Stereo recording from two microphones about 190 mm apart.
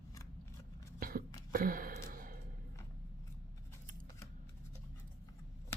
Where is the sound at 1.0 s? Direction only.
50° right (ahead or behind).